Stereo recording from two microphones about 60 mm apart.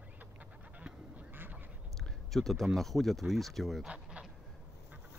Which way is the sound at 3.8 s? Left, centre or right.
Centre.